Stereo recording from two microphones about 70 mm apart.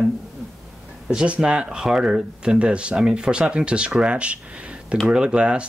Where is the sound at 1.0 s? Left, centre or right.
Centre.